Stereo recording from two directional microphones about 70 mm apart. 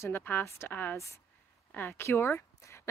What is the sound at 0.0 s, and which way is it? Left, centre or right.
Speech, left.